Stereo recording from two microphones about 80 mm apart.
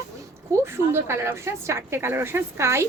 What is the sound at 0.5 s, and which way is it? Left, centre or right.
A woman's voice, right.